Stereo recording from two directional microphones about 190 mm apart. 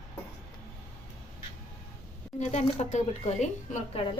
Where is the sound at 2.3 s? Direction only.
35° left (ahead or behind).